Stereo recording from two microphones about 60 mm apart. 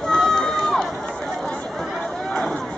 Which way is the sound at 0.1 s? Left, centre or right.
Centre.